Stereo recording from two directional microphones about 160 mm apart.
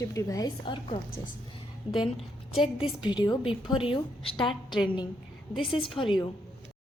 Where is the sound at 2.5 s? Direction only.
35° left (ahead or behind).